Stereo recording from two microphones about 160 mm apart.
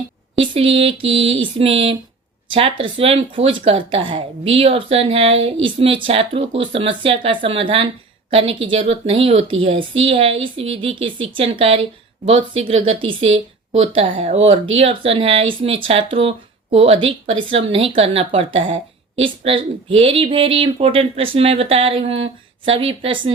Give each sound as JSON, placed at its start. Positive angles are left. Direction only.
{"t": 0.3, "sound": "speech", "side_deg": -35}